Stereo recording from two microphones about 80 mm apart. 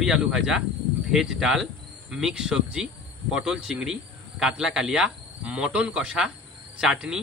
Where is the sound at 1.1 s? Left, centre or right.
Centre.